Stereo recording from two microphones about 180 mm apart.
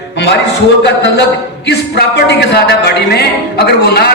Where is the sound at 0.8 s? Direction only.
75° left (ahead or behind).